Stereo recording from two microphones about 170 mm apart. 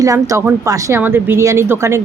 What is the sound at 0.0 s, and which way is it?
Speech, 20° right (ahead or behind).